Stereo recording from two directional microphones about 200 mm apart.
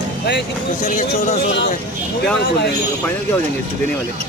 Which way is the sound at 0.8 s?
40° left (ahead or behind).